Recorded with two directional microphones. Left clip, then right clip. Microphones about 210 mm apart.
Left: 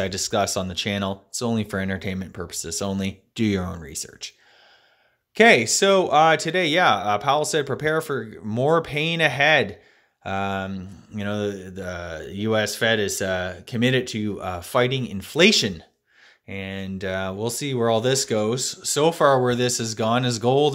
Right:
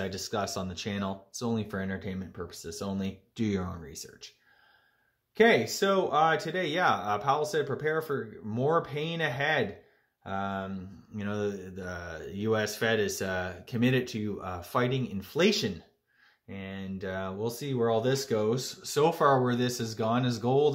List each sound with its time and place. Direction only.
0.0 s mantra: 35° left (ahead or behind)
5.3 s mantra: 40° left (ahead or behind)